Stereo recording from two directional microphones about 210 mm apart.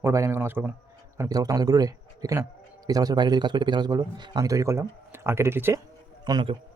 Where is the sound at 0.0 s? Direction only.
10° right (ahead or behind).